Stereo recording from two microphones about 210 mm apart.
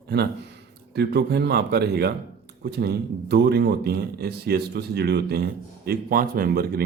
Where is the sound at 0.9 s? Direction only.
50° right (ahead or behind).